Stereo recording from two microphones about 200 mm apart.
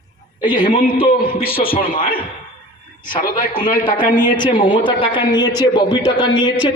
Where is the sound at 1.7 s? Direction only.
45° left (ahead or behind).